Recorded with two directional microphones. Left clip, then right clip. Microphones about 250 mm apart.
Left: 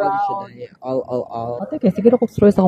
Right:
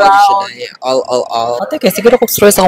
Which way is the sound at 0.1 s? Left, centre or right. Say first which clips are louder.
Right 13 dB; centre.